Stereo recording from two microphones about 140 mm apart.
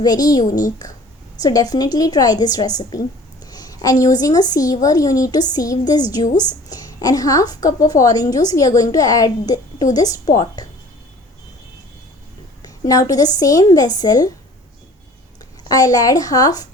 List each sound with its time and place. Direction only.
0.0 s a woman's voice: 30° left (ahead or behind)
12.6 s a woman's voice: 25° left (ahead or behind)
15.7 s a woman's voice: 25° left (ahead or behind)